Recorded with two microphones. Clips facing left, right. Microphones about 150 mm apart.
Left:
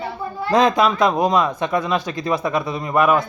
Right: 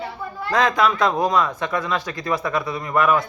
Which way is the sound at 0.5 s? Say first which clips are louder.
Left 3 dB; 20° left (ahead or behind).